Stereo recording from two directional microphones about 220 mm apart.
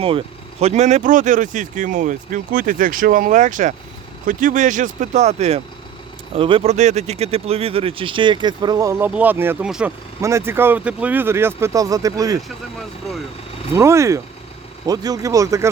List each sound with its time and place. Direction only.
0.0 s speech: 25° right (ahead or behind)
13.7 s speech: 10° right (ahead or behind)